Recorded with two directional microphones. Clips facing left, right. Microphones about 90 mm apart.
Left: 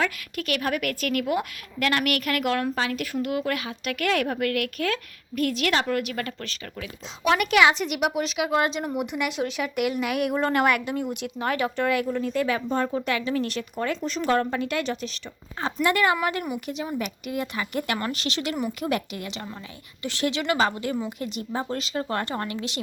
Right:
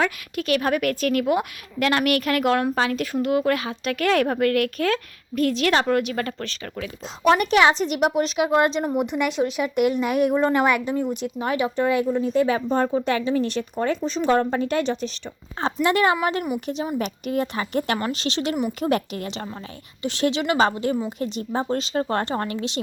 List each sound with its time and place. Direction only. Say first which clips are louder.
0.0 s a woman's voice: right 3 dB; 25° right (ahead or behind)
10.4 s a woman's voice: right 3 dB; 5° right (ahead or behind)
11.3 s a woman's voice: right 2 dB; 20° right (ahead or behind); by 15.1 s 35° right (ahead or behind)
15.6 s a woman's voice: right 3 dB; 25° right (ahead or behind)
20.0 s a woman's voice: right 4 dB; 25° right (ahead or behind)